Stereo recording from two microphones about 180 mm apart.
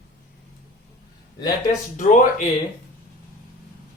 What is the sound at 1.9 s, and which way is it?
Speech, 45° left (ahead or behind).